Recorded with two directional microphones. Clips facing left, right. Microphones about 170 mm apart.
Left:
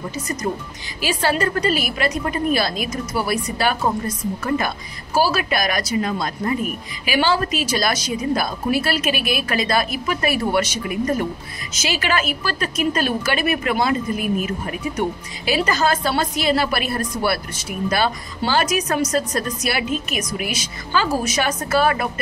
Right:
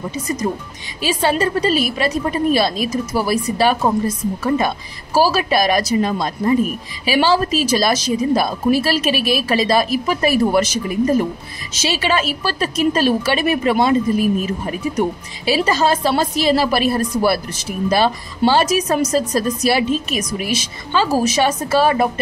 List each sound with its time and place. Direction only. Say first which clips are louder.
1.0 s a woman's voice: right 3 dB; 25° right (ahead or behind)